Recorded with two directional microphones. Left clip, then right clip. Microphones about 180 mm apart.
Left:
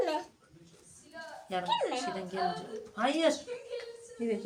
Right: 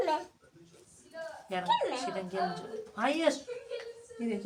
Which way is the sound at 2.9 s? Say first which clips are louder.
Left 2 dB; 15° left (ahead or behind).